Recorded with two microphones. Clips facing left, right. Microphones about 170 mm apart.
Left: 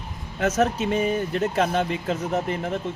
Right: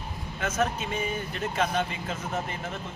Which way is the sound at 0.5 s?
75° left (ahead or behind).